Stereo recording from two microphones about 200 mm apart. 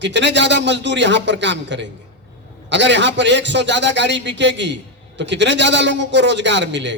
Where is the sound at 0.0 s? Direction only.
65° right (ahead or behind).